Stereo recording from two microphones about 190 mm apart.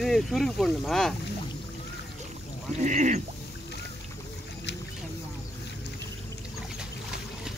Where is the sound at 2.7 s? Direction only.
40° right (ahead or behind).